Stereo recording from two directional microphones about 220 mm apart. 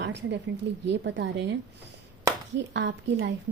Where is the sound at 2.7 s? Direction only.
55° right (ahead or behind).